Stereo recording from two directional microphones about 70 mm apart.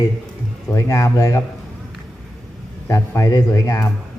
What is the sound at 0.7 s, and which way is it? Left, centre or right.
Speech, left.